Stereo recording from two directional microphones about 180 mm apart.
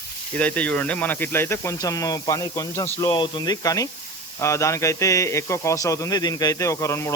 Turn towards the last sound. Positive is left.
turn(degrees=15)  # may be behind; listen again after turning